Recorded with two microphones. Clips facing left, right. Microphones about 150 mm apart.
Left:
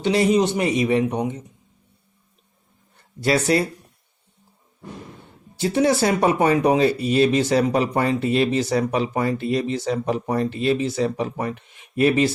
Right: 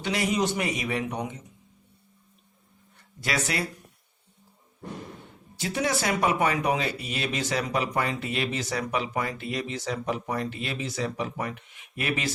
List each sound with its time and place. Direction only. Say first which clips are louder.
0.0 s a man's voice: left 8 dB; 30° left (ahead or behind)
3.2 s speech: left 10 dB; 35° left (ahead or behind)
5.5 s speech: left 9 dB; 30° left (ahead or behind)